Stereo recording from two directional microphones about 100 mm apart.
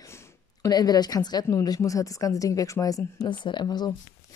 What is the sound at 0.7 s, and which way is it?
A woman's voice, 40° left (ahead or behind).